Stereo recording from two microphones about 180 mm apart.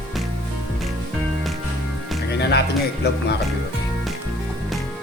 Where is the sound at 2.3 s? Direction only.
65° left (ahead or behind).